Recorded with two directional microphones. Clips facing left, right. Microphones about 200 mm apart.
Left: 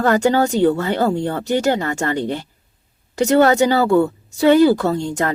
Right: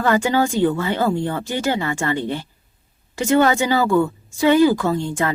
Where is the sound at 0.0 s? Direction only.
40° left (ahead or behind).